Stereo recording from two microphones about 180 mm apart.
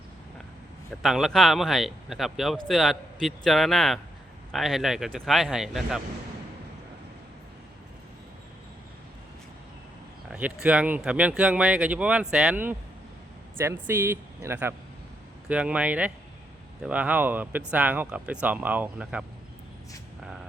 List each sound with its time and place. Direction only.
1.0 s speech: centre (ahead or behind)
10.3 s speech: 5° right (ahead or behind)